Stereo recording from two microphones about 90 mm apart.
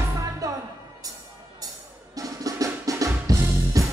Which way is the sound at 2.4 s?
40° right (ahead or behind).